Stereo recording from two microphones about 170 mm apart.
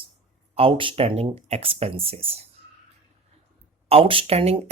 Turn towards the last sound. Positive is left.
turn(degrees=-35)  # may be behind; listen again after turning